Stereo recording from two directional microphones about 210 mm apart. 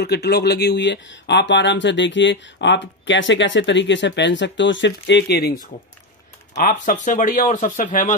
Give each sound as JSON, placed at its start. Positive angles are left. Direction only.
{"t": 0.0, "sound": "speech", "side_deg": 50}
{"t": 6.5, "sound": "speech", "side_deg": 40}